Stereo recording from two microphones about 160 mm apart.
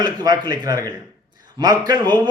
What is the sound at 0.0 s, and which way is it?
A man's voice, 25° right (ahead or behind).